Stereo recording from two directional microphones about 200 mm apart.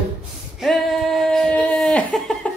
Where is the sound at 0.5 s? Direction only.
Centre (ahead or behind).